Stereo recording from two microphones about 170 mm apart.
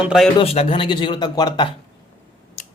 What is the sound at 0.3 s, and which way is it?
Speech, 35° left (ahead or behind).